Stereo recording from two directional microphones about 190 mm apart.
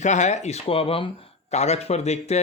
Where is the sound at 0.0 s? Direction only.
40° left (ahead or behind).